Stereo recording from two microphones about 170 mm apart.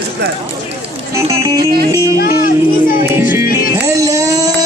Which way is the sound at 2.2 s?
60° left (ahead or behind).